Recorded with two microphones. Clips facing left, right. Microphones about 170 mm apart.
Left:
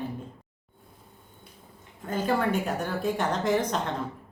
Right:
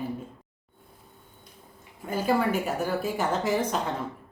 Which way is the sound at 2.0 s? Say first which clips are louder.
Right 1 dB; 10° right (ahead or behind).